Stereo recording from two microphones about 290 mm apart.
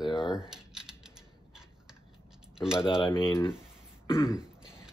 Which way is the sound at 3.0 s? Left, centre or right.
Centre.